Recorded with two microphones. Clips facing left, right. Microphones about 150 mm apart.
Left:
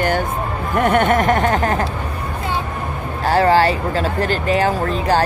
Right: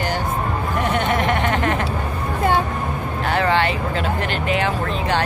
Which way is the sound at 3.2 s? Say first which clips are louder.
Left 6 dB; 35° left (ahead or behind).